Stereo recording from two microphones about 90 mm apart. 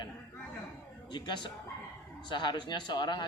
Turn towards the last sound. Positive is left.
turn(degrees=55)  # may be behind; listen again after turning